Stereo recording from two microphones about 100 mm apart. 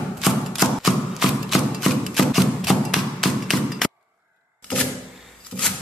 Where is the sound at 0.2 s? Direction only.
Centre (ahead or behind).